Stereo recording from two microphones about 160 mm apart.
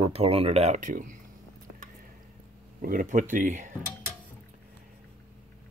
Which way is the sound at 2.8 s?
60° right (ahead or behind).